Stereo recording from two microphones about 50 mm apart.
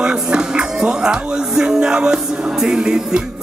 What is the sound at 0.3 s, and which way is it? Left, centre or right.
Music, centre.